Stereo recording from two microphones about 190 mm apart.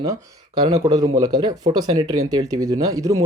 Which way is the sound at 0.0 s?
20° right (ahead or behind).